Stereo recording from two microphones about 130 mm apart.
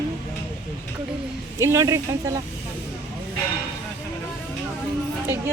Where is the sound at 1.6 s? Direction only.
20° right (ahead or behind).